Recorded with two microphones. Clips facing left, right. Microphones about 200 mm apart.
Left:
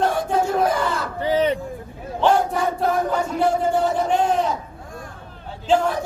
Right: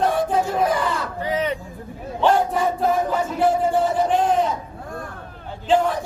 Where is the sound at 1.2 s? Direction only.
30° left (ahead or behind).